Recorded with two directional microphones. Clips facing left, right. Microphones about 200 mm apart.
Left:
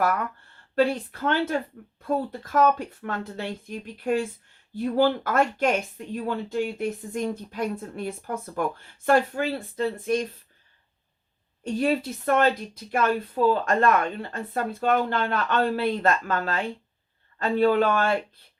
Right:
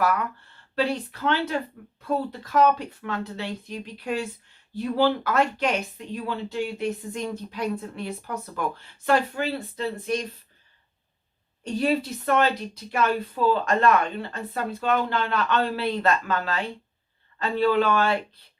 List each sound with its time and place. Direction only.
0.8 s a woman's voice: 50° left (ahead or behind)
11.6 s a woman's voice: 50° left (ahead or behind)